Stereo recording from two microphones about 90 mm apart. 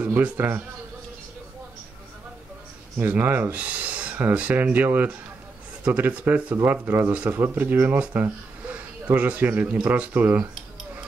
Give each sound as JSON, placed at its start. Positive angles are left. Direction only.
{"t": 0.0, "sound": "a man's voice", "side_deg": -20}
{"t": 3.0, "sound": "speech", "side_deg": -20}